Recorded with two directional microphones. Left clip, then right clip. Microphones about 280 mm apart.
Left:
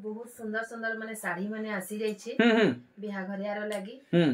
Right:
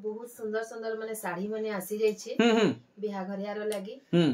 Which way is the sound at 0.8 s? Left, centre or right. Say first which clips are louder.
Even; centre.